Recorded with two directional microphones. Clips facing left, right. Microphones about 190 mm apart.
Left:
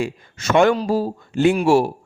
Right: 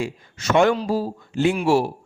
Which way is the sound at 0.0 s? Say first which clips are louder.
Left 3 dB; 55° left (ahead or behind).